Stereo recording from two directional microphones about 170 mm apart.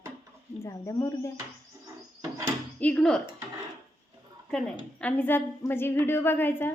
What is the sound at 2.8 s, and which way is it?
Speech, 5° left (ahead or behind).